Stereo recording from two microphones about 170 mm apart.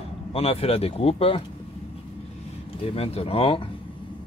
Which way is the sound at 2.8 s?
35° left (ahead or behind).